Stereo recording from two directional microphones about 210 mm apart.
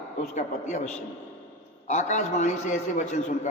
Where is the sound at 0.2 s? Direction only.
35° left (ahead or behind).